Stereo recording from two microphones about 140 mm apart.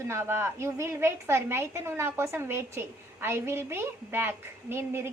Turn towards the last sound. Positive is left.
turn(degrees=-15)  # may be behind; listen again after turning